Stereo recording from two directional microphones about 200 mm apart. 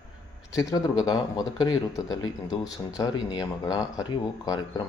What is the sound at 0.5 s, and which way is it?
Speech, 20° left (ahead or behind).